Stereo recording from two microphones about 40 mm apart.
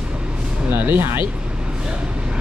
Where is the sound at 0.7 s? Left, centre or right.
Right.